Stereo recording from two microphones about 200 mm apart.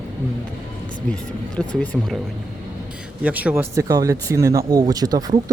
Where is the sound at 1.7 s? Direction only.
5° left (ahead or behind).